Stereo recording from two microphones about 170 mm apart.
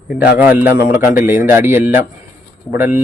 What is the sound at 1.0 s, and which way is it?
Speech, 55° left (ahead or behind).